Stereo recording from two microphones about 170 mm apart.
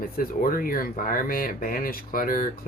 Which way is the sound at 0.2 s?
55° left (ahead or behind).